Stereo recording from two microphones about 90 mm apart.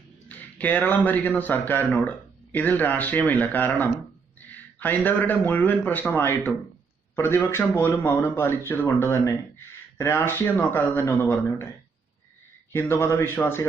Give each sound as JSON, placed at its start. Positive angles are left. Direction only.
{"t": 0.3, "sound": "speech", "side_deg": 20}
{"t": 12.7, "sound": "speech", "side_deg": 25}